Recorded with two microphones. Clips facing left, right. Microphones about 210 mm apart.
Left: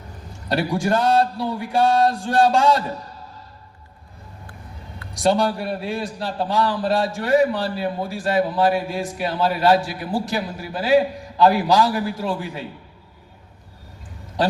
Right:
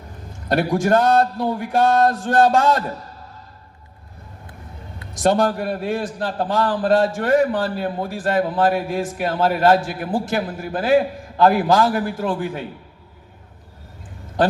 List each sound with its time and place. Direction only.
0.4 s a man's voice: 50° right (ahead or behind)
5.2 s a man's voice: 50° right (ahead or behind)